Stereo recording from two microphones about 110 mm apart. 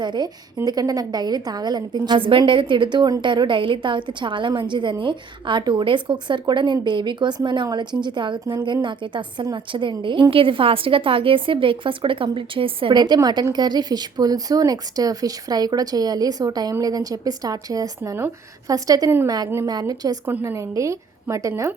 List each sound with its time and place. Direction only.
0.0 s a woman's voice: 40° right (ahead or behind); by 21.8 s 25° right (ahead or behind)